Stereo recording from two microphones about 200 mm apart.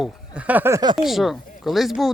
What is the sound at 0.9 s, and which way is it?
Speech, centre (ahead or behind).